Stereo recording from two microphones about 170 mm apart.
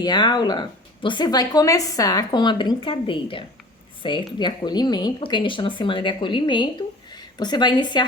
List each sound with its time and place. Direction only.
0.0 s a woman's voice: 25° left (ahead or behind)